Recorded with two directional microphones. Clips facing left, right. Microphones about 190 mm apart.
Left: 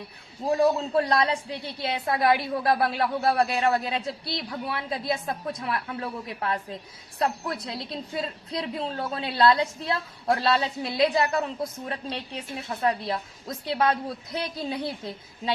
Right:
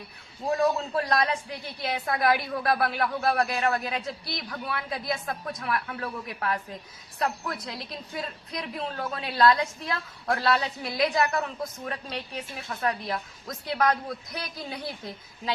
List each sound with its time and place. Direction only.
0.6 s a woman's voice: 30° left (ahead or behind)